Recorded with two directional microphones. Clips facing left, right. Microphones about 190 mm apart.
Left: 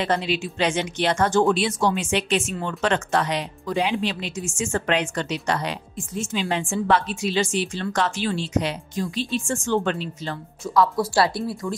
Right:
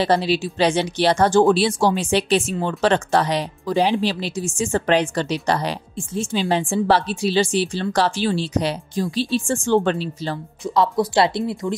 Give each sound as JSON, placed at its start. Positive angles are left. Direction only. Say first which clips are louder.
{"t": 0.0, "sound": "speech", "louder": "right 5 dB", "side_deg": -35}
{"t": 2.5, "sound": "speech", "louder": "right 5 dB", "side_deg": -20}
{"t": 2.8, "sound": "speech", "louder": "right 4 dB", "side_deg": -35}
{"t": 10.6, "sound": "speech", "louder": "right 1 dB", "side_deg": -20}